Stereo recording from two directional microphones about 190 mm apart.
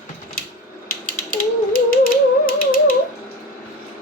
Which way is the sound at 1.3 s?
45° left (ahead or behind).